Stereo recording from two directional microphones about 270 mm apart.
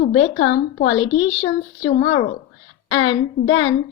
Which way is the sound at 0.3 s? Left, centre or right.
Left.